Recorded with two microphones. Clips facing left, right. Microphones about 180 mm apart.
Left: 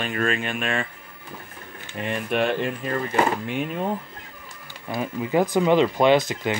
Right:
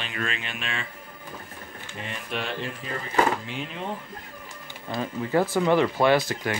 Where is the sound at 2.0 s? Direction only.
55° left (ahead or behind).